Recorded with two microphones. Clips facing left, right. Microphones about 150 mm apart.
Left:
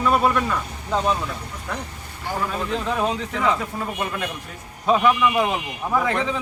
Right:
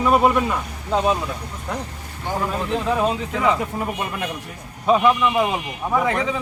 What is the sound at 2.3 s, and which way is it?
Speech, 10° right (ahead or behind).